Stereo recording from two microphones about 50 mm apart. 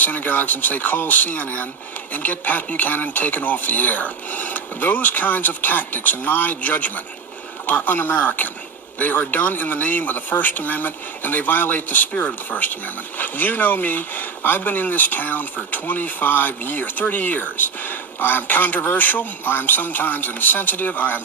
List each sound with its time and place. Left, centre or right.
0.0 s speech: left